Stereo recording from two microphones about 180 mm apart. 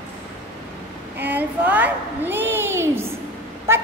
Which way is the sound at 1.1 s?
10° right (ahead or behind).